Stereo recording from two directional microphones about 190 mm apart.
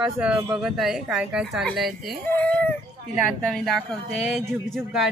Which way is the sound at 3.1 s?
Centre (ahead or behind).